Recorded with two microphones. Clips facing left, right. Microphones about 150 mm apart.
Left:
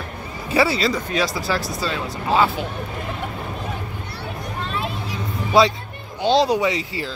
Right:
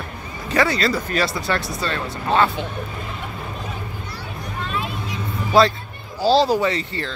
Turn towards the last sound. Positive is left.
turn(degrees=5)  # may be behind; listen again after turning